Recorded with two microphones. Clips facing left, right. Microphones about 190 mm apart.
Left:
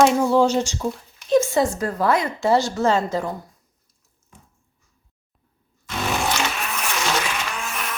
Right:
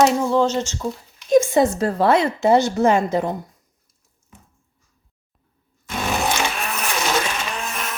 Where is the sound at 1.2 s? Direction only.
15° right (ahead or behind).